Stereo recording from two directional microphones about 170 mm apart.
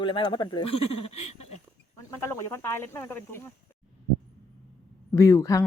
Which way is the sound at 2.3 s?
15° left (ahead or behind).